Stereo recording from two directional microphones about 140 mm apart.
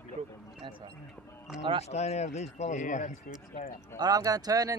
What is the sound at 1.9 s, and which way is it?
Speech, 50° left (ahead or behind).